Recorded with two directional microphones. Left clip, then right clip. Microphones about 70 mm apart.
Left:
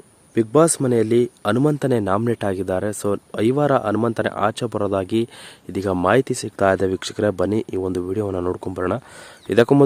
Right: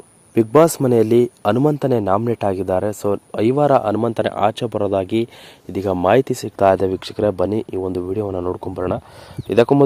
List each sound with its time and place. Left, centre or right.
0.3 s speech: centre
0.8 s speech: centre
1.5 s speech: centre
6.1 s speech: centre
6.6 s speech: left
8.3 s speech: left
8.6 s speech: left
9.5 s speech: left